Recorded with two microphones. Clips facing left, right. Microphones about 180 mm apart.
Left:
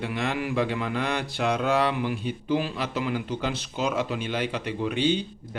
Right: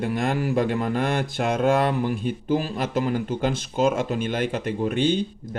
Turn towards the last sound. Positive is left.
turn(degrees=-45)  # may be behind; listen again after turning